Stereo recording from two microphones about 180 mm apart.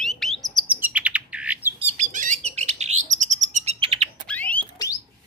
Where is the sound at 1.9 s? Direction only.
45° right (ahead or behind).